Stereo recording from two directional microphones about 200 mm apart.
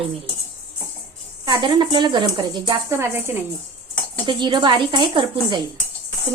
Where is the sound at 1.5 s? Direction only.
20° right (ahead or behind).